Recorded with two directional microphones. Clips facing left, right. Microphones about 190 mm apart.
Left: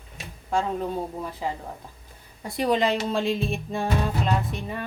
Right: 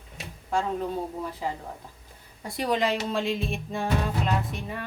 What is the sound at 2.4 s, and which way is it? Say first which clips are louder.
Music: left 3 dB; 25° left (ahead or behind).